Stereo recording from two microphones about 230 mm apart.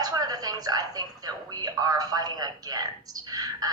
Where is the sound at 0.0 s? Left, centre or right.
Centre.